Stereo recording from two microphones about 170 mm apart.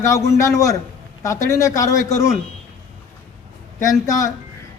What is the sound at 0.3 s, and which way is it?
Speech, 20° left (ahead or behind).